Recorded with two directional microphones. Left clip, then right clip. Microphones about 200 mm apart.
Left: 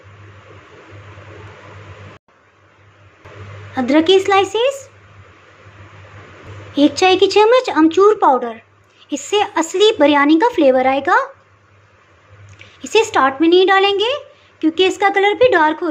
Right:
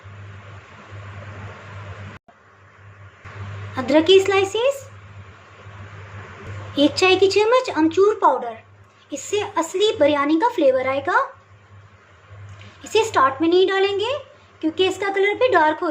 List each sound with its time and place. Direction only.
3.8 s speech: 15° left (ahead or behind)
6.7 s speech: 15° left (ahead or behind)
12.8 s speech: 25° left (ahead or behind)